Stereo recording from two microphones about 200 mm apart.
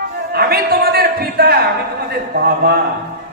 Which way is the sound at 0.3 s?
50° right (ahead or behind).